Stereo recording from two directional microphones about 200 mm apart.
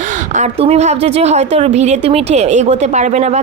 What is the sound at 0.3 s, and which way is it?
A woman's voice, 35° right (ahead or behind).